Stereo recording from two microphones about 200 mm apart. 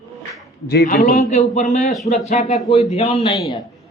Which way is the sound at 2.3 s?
40° left (ahead or behind).